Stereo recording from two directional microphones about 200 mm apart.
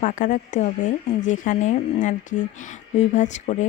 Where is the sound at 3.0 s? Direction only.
35° left (ahead or behind).